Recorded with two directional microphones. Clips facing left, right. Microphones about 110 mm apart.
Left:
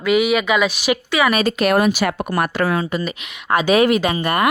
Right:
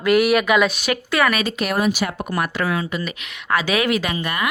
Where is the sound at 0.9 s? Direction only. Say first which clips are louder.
Left 3 dB; 15° left (ahead or behind).